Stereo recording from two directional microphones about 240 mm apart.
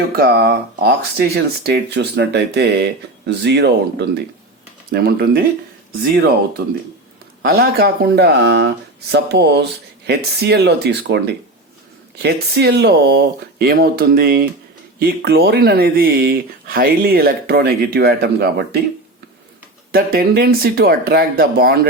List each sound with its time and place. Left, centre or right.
0.2 s speech: right
19.9 s speech: right